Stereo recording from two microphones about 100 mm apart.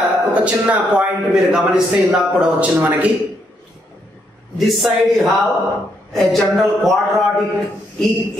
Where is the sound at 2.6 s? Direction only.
15° right (ahead or behind).